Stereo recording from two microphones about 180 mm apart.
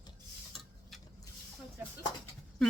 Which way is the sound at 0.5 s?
Centre (ahead or behind).